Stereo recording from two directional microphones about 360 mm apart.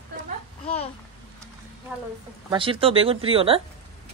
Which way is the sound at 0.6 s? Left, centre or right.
Centre.